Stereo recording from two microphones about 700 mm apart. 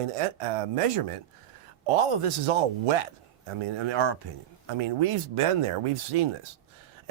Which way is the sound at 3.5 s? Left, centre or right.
Right.